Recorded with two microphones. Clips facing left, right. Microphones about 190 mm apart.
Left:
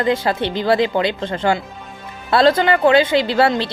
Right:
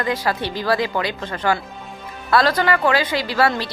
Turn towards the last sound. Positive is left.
turn(degrees=25)  # may be behind; listen again after turning